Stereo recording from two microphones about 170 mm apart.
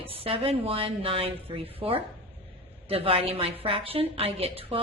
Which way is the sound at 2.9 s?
35° right (ahead or behind).